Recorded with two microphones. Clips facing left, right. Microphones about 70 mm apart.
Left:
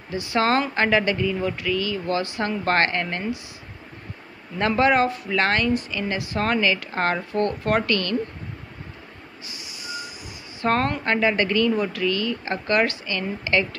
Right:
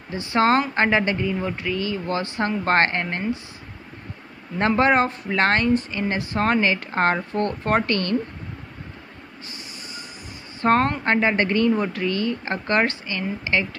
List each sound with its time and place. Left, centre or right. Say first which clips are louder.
0.1 s speech: right 2 dB; right
4.6 s speech: right 1 dB; right
10.6 s speech: right 3 dB; right